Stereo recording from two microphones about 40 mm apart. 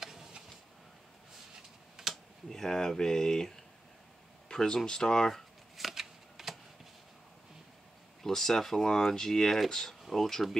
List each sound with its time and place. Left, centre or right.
0.0 s tick-tock: centre
2.0 s computer keyboard: centre
2.5 s speech: centre
5.8 s shuffling cards: centre
8.2 s speech: centre